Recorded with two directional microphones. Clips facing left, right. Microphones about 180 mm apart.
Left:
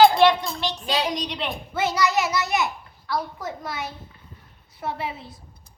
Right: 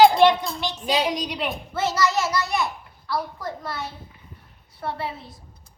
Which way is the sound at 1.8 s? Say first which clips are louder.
Even; 15° left (ahead or behind).